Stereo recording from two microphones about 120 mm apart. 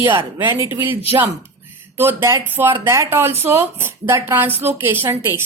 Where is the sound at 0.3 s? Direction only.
20° right (ahead or behind).